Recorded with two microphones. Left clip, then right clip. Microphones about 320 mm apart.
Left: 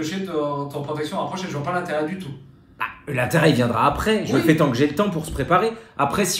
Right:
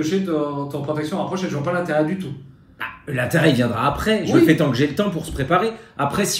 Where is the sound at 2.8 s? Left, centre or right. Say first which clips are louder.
Left 1 dB; left.